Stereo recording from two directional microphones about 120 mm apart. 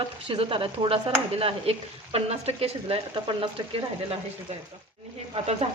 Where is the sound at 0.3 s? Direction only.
50° right (ahead or behind).